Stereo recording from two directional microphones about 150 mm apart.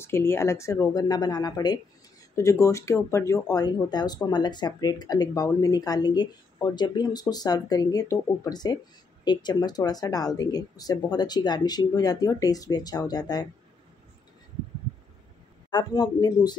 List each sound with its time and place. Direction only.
0.0 s speech: 15° left (ahead or behind)
15.7 s speech: 25° left (ahead or behind)